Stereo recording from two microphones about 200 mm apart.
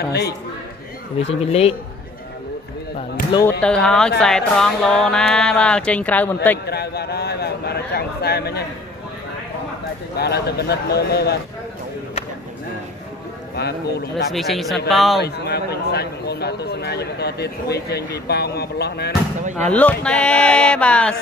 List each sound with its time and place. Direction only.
1.2 s a man's voice: 30° left (ahead or behind)
3.3 s speech: 20° left (ahead or behind)
3.6 s speech: 5° left (ahead or behind)
6.6 s speech: 55° left (ahead or behind)
10.1 s speech: 55° left (ahead or behind)
13.6 s speech: 55° left (ahead or behind)
14.3 s speech: centre (ahead or behind)
15.2 s speech: 55° left (ahead or behind)
19.7 s speech: 5° left (ahead or behind)